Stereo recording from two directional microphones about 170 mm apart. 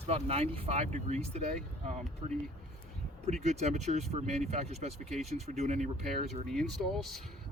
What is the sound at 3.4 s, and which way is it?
Speech, 40° right (ahead or behind).